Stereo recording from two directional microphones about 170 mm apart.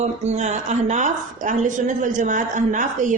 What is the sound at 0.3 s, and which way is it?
A woman's voice, 40° right (ahead or behind).